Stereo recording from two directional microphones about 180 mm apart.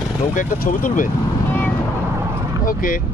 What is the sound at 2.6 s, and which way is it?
Vehicle, 50° left (ahead or behind).